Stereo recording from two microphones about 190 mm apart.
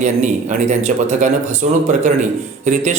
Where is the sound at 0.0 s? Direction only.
40° right (ahead or behind).